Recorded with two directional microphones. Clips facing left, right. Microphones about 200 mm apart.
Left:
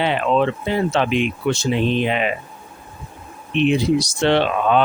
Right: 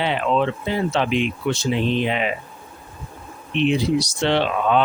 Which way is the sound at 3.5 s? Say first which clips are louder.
Left 2 dB; 55° left (ahead or behind).